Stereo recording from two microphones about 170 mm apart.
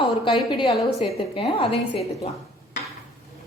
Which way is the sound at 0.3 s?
25° left (ahead or behind).